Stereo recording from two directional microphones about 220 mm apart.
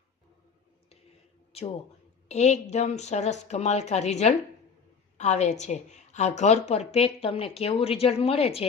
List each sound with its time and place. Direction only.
2.2 s a woman's voice: 30° left (ahead or behind)